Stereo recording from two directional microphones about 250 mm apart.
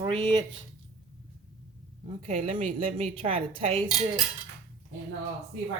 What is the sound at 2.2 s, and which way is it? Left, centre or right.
Speech, right.